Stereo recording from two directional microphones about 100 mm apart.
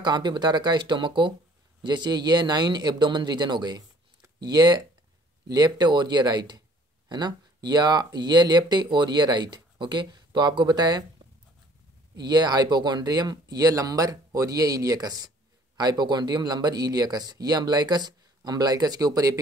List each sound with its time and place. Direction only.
0.0 s speech: 45° right (ahead or behind)
12.2 s speech: 45° right (ahead or behind)